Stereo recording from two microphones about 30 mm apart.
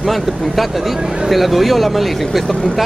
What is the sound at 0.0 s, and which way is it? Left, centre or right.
Speech, centre.